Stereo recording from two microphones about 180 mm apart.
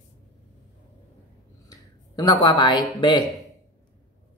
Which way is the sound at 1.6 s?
20° left (ahead or behind).